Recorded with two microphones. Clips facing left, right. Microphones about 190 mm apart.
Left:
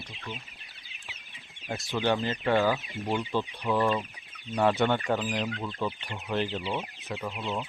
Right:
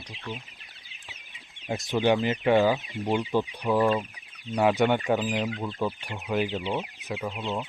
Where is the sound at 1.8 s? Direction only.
15° right (ahead or behind).